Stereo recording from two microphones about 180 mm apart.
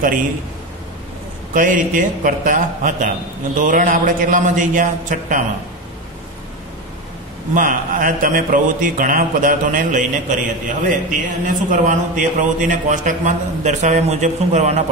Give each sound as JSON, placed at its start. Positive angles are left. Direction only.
{"t": 0.0, "sound": "a man's voice", "side_deg": -50}
{"t": 1.5, "sound": "a man's voice", "side_deg": -50}
{"t": 7.5, "sound": "a man's voice", "side_deg": -50}